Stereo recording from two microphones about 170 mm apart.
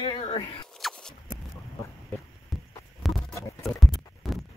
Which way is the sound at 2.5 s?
Centre (ahead or behind).